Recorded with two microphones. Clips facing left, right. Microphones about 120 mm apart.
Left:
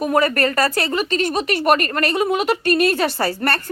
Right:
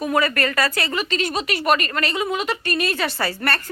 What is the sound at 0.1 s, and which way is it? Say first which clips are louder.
A woman's voice: left 3 dB; 40° left (ahead or behind).